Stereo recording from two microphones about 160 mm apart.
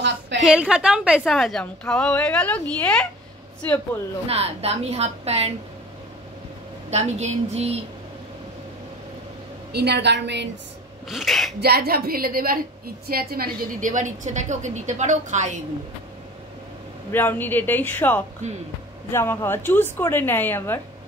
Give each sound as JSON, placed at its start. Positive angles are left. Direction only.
{"t": 0.4, "sound": "a woman's voice", "side_deg": -5}
{"t": 4.3, "sound": "a woman's voice", "side_deg": -40}
{"t": 6.9, "sound": "a woman's voice", "side_deg": -45}
{"t": 9.7, "sound": "a woman's voice", "side_deg": -90}
{"t": 11.1, "sound": "a woman's voice", "side_deg": 0}
{"t": 11.6, "sound": "a woman's voice", "side_deg": -80}
{"t": 17.1, "sound": "a woman's voice", "side_deg": 10}